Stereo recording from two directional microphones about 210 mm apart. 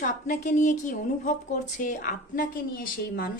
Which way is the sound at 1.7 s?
40° left (ahead or behind).